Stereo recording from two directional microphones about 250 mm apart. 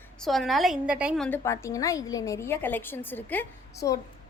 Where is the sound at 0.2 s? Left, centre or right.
Centre.